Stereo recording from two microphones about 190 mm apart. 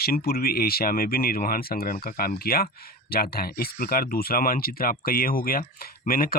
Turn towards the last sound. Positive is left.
turn(degrees=50)  # may be behind; listen again after turning